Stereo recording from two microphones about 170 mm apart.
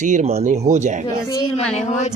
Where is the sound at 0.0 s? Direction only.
45° right (ahead or behind).